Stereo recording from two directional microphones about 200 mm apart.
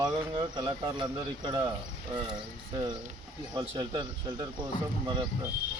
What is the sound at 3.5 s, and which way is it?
Speech, 20° right (ahead or behind).